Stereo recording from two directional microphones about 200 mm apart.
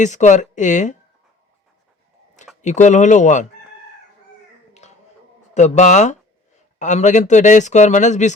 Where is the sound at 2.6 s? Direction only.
35° left (ahead or behind).